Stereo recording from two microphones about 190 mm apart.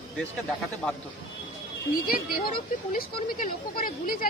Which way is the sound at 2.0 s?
50° left (ahead or behind).